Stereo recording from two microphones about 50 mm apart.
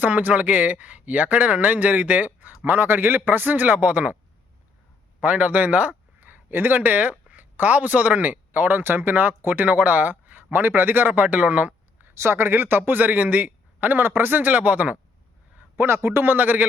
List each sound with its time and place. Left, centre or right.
0.0 s speech: right
2.6 s speech: right
5.2 s speech: right
12.1 s speech: right
13.8 s speech: right
14.5 s speech: right
15.7 s a man's voice: right
16.2 s speech: right